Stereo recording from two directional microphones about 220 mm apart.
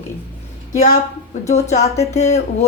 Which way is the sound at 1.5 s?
30° left (ahead or behind).